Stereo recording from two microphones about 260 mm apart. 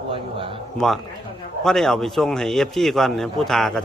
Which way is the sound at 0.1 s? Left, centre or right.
Centre.